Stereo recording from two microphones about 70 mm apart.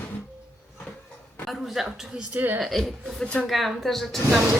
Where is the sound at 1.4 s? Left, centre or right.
Centre.